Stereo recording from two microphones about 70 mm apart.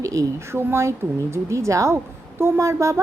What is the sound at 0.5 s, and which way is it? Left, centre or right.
A woman's voice, right.